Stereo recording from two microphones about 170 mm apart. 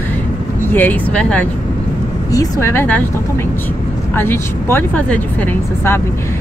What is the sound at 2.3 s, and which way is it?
Speech, 20° left (ahead or behind).